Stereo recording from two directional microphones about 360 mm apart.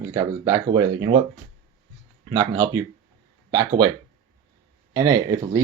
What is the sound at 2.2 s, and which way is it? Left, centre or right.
Speech, centre.